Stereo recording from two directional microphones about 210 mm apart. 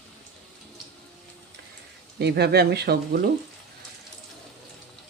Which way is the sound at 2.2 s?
50° right (ahead or behind).